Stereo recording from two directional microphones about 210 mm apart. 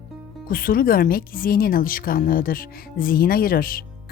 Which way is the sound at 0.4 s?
45° left (ahead or behind).